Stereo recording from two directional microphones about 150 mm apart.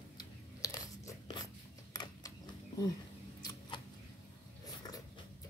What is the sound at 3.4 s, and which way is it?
Scissors, 30° left (ahead or behind).